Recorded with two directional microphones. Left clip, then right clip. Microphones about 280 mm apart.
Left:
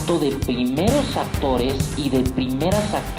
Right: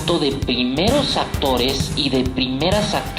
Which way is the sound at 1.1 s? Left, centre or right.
Left.